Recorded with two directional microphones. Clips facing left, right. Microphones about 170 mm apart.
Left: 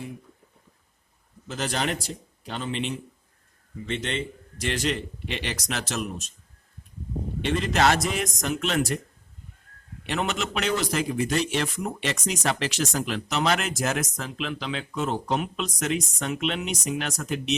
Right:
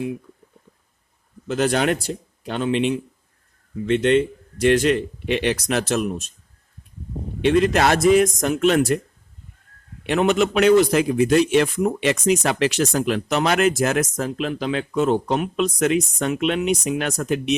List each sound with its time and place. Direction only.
1.5 s a man's voice: 60° right (ahead or behind)
3.9 s a man's voice: 55° right (ahead or behind)
7.4 s a man's voice: 60° right (ahead or behind)
10.1 s a man's voice: 55° right (ahead or behind)